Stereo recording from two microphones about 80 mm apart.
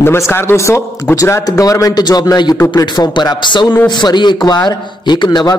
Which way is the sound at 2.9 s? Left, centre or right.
Left.